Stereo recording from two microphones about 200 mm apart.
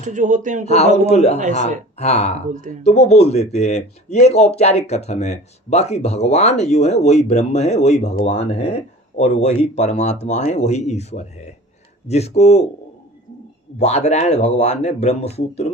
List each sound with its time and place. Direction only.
0.0 s speech: 40° right (ahead or behind)
0.6 s speech: 30° left (ahead or behind)
13.7 s speech: 35° left (ahead or behind)